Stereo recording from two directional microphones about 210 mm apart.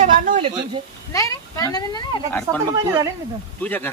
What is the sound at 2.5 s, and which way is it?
Speech, 15° right (ahead or behind).